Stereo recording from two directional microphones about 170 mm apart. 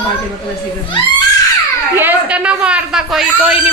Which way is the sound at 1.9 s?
10° right (ahead or behind).